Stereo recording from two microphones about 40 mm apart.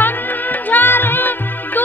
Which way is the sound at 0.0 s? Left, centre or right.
Left.